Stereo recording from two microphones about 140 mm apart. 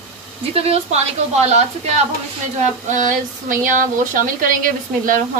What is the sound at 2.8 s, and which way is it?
Speech, 65° right (ahead or behind).